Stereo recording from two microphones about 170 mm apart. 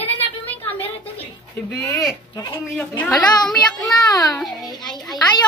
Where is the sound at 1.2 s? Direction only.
15° left (ahead or behind).